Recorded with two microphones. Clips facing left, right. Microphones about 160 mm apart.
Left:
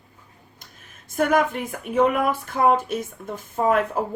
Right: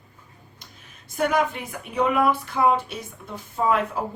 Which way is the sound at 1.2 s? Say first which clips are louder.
Left 2 dB; 50° left (ahead or behind).